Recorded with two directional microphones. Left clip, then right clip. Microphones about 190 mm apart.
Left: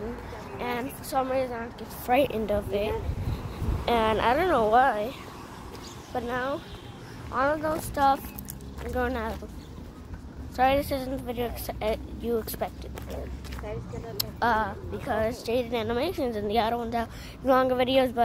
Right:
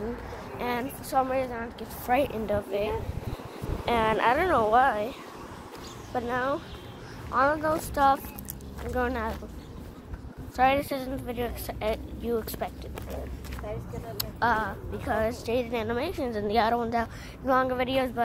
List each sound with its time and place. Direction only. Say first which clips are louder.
0.6 s a sound: right 1 dB; 20° right (ahead or behind)
1.1 s a woman's voice: right 1 dB; 5° left (ahead or behind)
2.0 s a woman's voice: left 2 dB; 20° left (ahead or behind)
6.1 s speech: right 1 dB; 10° right (ahead or behind)
10.5 s a woman's voice: even; 5° left (ahead or behind)
14.1 s a woman's voice: left 1 dB; 20° left (ahead or behind); by 16.7 s centre (ahead or behind)
16.7 s speech: right 2 dB; 10° right (ahead or behind)
17.5 s speech: left 3 dB; 25° left (ahead or behind)